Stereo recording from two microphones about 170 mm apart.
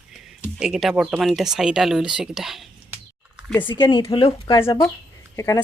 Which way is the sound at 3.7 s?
30° left (ahead or behind).